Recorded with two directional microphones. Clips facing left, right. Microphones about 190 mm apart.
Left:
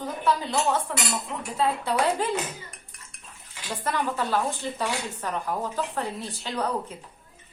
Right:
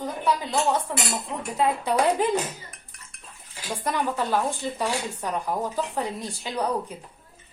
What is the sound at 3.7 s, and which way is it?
Speech, 15° right (ahead or behind).